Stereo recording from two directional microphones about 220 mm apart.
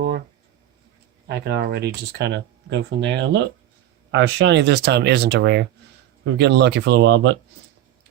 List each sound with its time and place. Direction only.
1.3 s speech: 45° right (ahead or behind)